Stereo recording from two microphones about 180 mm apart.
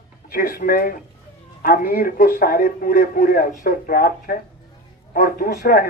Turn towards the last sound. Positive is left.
turn(degrees=50)  # may be behind; listen again after turning